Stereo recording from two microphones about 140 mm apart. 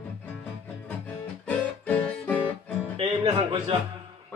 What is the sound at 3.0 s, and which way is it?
Music, 40° right (ahead or behind).